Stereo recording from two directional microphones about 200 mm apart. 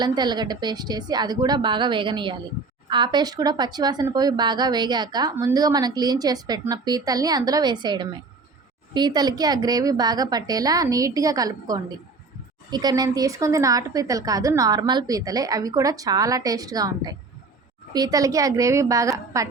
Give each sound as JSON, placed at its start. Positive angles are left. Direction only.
{"t": 0.0, "sound": "a woman's voice", "side_deg": -20}